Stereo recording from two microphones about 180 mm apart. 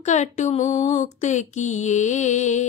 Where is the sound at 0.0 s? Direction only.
40° left (ahead or behind).